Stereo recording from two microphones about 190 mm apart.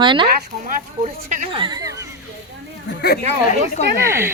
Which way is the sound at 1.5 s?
25° right (ahead or behind).